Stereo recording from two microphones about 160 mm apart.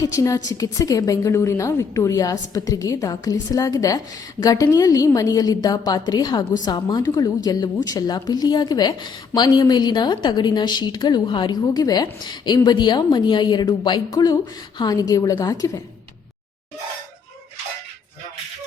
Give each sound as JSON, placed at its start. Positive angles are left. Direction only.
{"t": 0.0, "sound": "a woman's voice", "side_deg": 20}